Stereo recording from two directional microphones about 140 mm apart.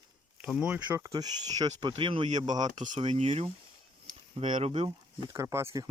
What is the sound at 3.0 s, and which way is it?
Speech, 50° right (ahead or behind).